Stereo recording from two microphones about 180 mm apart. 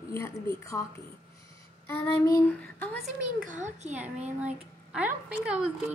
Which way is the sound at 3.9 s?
10° right (ahead or behind).